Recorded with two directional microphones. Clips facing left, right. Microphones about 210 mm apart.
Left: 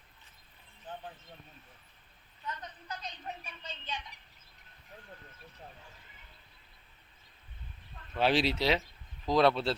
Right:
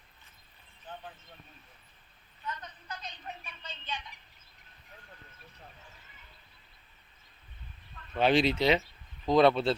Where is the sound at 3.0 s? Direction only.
40° left (ahead or behind).